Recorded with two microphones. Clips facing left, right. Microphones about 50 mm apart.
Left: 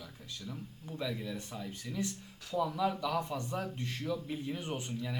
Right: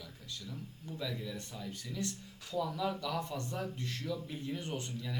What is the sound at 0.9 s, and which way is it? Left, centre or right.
A man's voice, centre.